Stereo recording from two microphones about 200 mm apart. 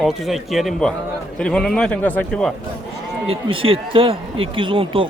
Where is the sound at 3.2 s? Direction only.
30° right (ahead or behind).